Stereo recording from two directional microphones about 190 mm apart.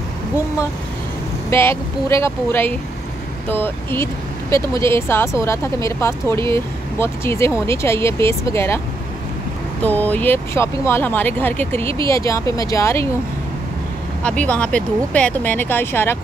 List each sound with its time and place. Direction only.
1.5 s speech: 15° left (ahead or behind)
14.2 s speech: 5° left (ahead or behind)